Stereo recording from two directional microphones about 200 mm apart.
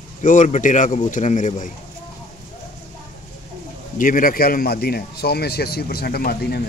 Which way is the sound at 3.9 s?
45° left (ahead or behind).